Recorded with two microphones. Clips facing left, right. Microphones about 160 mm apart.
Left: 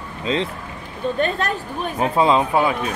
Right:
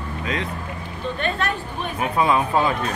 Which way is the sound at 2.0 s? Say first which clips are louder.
Left 3 dB; 25° left (ahead or behind).